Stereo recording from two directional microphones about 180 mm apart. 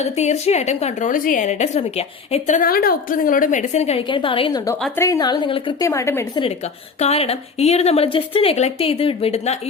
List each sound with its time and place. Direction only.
0.0 s a woman's voice: 40° left (ahead or behind)
5.9 s a woman's voice: 15° left (ahead or behind)
7.0 s a woman's voice: 35° left (ahead or behind)